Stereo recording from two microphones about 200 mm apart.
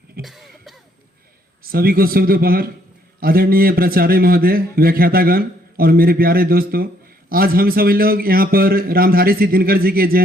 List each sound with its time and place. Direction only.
0.2 s cough: centre (ahead or behind)
1.6 s a man's voice: 50° right (ahead or behind)